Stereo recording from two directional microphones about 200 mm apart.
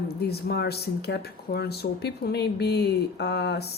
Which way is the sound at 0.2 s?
55° left (ahead or behind).